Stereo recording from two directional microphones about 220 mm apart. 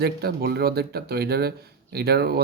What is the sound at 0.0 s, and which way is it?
Speech, 45° right (ahead or behind).